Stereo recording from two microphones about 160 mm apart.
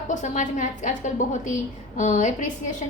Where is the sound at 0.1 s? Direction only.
50° left (ahead or behind).